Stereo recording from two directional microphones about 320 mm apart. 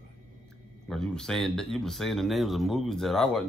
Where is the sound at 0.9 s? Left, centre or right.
Centre.